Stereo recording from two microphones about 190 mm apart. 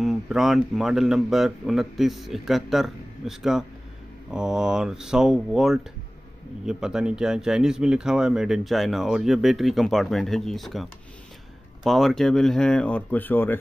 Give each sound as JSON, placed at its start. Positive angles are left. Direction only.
{"t": 0.0, "sound": "speech", "side_deg": 0}